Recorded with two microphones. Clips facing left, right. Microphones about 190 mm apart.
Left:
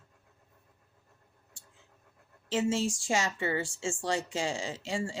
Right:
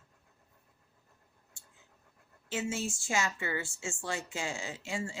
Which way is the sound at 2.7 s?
90° left.